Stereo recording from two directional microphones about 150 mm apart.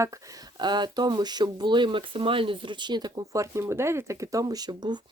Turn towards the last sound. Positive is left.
turn(degrees=-30)  # may be behind; listen again after turning